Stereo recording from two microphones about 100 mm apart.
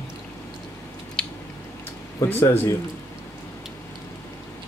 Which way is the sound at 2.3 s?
30° left (ahead or behind).